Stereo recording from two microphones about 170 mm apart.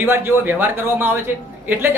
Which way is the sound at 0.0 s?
10° right (ahead or behind).